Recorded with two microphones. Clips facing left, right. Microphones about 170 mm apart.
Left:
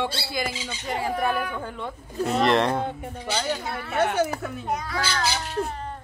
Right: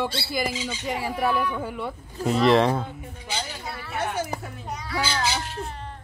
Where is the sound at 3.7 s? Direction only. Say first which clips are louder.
Left 4 dB; 65° left (ahead or behind).